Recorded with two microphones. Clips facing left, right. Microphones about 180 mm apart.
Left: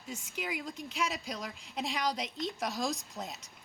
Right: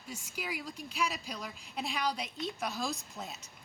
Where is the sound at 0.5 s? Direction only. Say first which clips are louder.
Left 2 dB; 20° left (ahead or behind).